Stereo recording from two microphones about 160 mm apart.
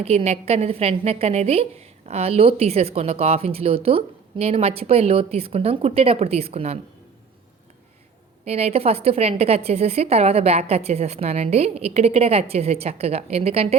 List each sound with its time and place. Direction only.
0.0 s a woman's voice: 40° right (ahead or behind)
8.4 s a woman's voice: 40° right (ahead or behind)